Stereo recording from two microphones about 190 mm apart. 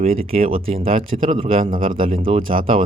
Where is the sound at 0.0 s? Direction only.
30° right (ahead or behind).